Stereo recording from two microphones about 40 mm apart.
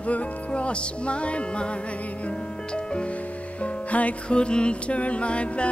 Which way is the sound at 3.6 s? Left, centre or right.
Left.